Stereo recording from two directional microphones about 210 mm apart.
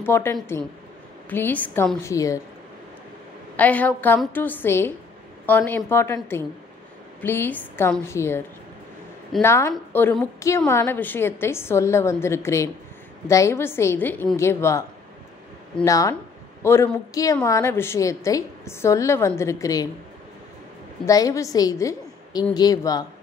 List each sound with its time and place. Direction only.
0.0 s a woman's voice: 10° left (ahead or behind)
3.5 s a woman's voice: 5° left (ahead or behind)
21.0 s a woman's voice: 15° left (ahead or behind)